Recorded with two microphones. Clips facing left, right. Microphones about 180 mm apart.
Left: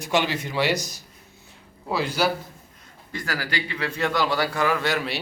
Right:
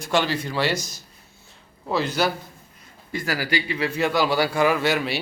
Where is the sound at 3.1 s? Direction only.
10° right (ahead or behind).